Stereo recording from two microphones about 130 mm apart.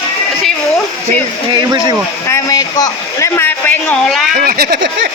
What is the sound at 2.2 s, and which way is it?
Speech, 25° left (ahead or behind).